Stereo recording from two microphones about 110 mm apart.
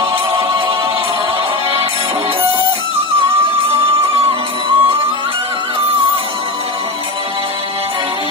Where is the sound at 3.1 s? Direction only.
60° right (ahead or behind).